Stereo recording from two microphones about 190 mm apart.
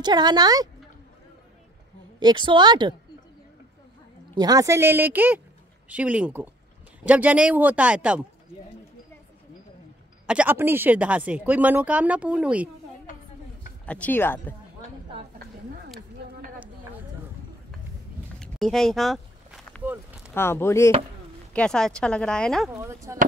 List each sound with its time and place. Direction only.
0.0 s a woman's voice: 20° right (ahead or behind)
2.1 s a woman's voice: 25° right (ahead or behind)
4.4 s speech: 20° right (ahead or behind)
10.2 s speech: 10° right (ahead or behind)
13.8 s speech: 5° left (ahead or behind)
18.4 s a sound: centre (ahead or behind)
20.3 s speech: 10° left (ahead or behind)
22.8 s speech: 15° right (ahead or behind)